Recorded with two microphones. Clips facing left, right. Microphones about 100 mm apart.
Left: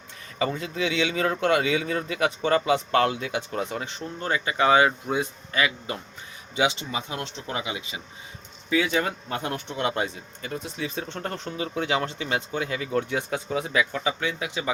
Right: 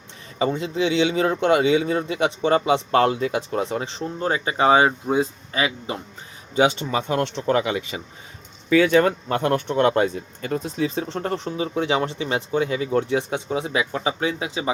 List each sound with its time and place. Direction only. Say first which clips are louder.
0.3 s speech: right 5 dB; 25° right (ahead or behind)
6.6 s speech: right 6 dB; 50° right (ahead or behind); by 14.7 s 25° right (ahead or behind)